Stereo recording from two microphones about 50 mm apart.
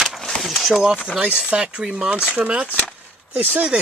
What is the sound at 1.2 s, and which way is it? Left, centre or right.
Speech, right.